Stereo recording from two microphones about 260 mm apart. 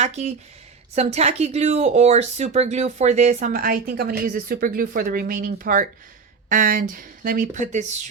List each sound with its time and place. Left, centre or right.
0.0 s speech: right